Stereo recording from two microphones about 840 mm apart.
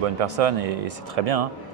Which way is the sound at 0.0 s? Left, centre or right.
Right.